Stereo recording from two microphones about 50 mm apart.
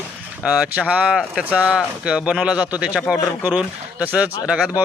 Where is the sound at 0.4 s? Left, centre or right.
Centre.